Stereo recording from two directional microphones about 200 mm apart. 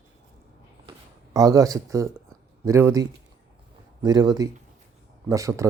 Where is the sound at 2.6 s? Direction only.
15° right (ahead or behind).